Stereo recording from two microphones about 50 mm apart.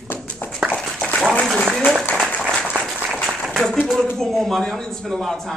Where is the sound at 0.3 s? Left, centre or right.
Left.